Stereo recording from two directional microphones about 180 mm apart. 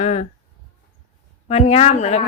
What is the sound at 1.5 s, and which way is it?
Speech, 35° left (ahead or behind).